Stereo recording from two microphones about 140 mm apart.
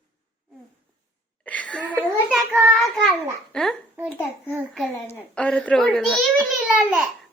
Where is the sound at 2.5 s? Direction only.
10° right (ahead or behind).